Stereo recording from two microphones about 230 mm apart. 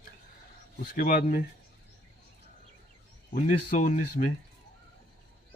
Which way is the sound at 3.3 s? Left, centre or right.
Left.